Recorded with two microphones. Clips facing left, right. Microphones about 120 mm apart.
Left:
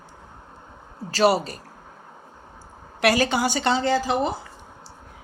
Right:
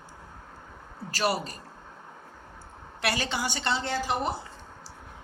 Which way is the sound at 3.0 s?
90° left.